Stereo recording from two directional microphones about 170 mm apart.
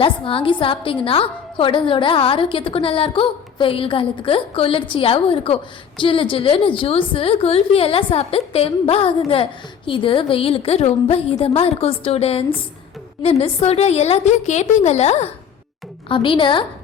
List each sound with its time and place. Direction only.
0.0 s a woman's voice: 30° left (ahead or behind)